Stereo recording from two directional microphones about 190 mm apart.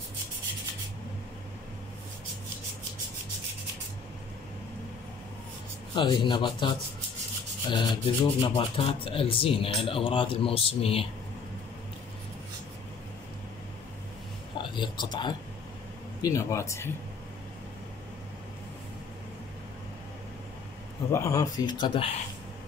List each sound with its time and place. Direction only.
5.9 s speech: 25° left (ahead or behind)
7.7 s speech: 25° left (ahead or behind)
14.6 s speech: 25° left (ahead or behind)
21.1 s speech: 15° left (ahead or behind)